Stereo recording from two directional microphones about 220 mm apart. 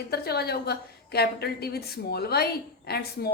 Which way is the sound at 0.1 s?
45° left (ahead or behind).